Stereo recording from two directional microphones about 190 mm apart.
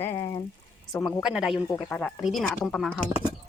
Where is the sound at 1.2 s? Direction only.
5° right (ahead or behind).